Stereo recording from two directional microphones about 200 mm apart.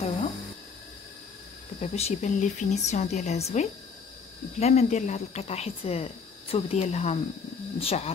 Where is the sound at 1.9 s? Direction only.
35° left (ahead or behind).